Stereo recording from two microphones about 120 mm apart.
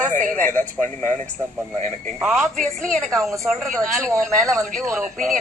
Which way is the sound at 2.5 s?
90° right.